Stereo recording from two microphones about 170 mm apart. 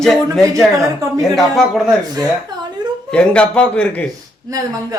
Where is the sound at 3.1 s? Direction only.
5° left (ahead or behind).